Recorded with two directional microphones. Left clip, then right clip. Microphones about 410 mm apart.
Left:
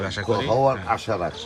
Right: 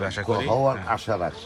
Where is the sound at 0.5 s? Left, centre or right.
Right.